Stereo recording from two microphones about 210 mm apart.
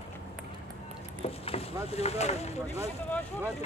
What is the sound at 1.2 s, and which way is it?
Speech, 30° left (ahead or behind).